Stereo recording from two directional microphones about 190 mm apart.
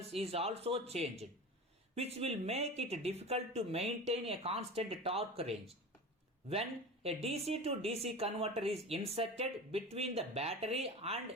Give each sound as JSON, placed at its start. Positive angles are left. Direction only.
{"t": 0.1, "sound": "speech", "side_deg": -30}